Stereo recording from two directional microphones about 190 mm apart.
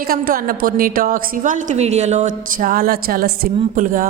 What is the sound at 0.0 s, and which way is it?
A woman's voice, 50° right (ahead or behind).